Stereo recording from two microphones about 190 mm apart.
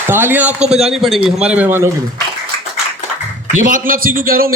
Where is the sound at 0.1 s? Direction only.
10° right (ahead or behind).